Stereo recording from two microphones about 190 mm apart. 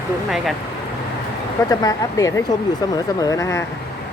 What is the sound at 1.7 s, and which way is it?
Speech, 15° left (ahead or behind).